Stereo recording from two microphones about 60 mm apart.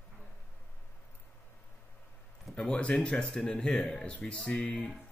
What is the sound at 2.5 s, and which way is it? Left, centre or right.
Speech, centre.